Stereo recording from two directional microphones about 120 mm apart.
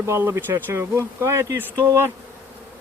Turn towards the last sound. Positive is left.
turn(degrees=-20)  # may be behind; listen again after turning